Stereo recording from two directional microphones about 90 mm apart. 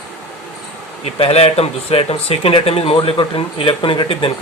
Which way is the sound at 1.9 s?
90° left.